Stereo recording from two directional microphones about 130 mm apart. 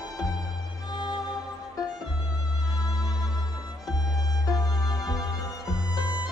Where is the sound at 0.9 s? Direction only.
30° left (ahead or behind).